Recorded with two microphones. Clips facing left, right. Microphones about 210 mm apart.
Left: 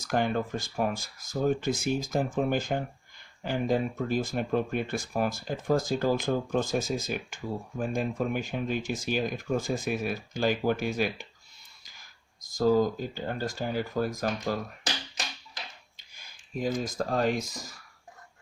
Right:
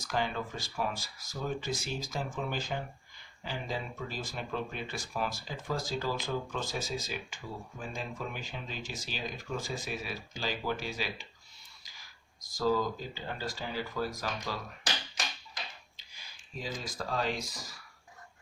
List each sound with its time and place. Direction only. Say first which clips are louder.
0.1 s speech: left 7 dB; 50° left (ahead or behind)
12.5 s speech: left 6 dB; 45° left (ahead or behind)
16.1 s speech: left 9 dB; 50° left (ahead or behind)